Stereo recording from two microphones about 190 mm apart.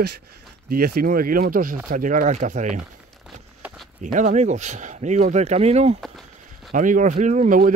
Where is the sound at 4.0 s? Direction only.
40° right (ahead or behind).